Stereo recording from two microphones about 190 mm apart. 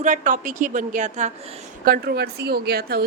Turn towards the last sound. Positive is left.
turn(degrees=-55)  # may be behind; listen again after turning